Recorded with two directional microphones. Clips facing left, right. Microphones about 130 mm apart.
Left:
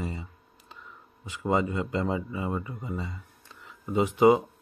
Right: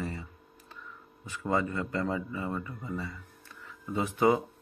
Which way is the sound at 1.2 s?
15° left (ahead or behind).